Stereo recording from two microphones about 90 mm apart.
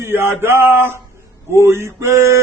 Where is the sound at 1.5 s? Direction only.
30° right (ahead or behind).